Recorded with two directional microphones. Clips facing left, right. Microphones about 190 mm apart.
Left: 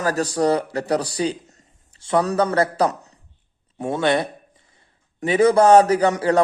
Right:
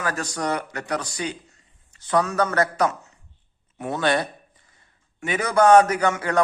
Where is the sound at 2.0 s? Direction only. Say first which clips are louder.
Left 3 dB; 25° left (ahead or behind).